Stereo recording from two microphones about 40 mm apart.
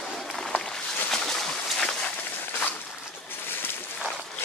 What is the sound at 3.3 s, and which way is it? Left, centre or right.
Boat, left.